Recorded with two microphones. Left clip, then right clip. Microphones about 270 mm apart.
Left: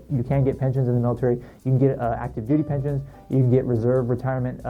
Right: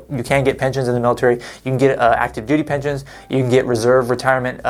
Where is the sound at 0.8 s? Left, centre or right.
Centre.